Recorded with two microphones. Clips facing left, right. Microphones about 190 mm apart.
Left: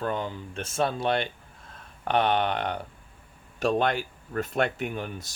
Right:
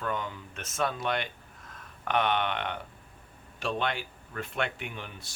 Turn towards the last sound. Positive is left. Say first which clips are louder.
# left 9 dB
turn(degrees=45)  # may be behind; listen again after turning